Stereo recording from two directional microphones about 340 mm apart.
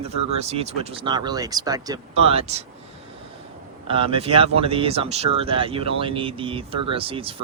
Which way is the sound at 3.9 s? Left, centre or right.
Centre.